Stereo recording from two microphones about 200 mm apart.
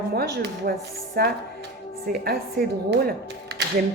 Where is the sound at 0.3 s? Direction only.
50° right (ahead or behind).